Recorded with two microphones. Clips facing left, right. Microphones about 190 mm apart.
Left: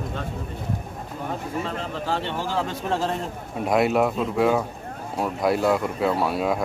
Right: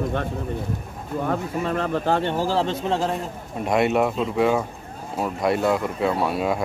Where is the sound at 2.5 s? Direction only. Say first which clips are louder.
Right 4 dB; 25° right (ahead or behind).